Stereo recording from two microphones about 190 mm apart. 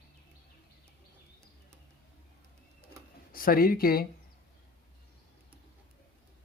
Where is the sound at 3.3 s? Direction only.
50° left (ahead or behind).